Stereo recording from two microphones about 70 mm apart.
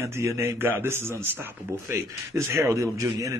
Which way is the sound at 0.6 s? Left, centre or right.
Right.